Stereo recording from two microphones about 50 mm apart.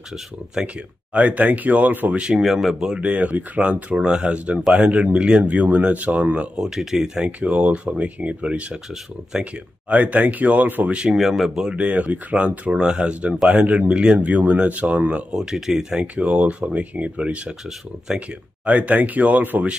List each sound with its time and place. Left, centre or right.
0.7 s speech: right
2.1 s speech: centre
2.4 s speech: centre
3.1 s speech: right
3.9 s speech: centre
6.5 s speech: centre
7.2 s speech: right
11.1 s speech: centre
11.7 s speech: right
12.7 s speech: centre
15.5 s speech: centre
16.0 s speech: right
18.7 s speech: right